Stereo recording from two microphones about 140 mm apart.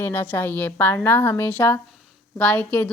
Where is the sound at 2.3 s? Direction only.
10° left (ahead or behind).